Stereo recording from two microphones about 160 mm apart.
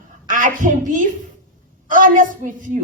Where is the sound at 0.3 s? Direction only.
60° right (ahead or behind).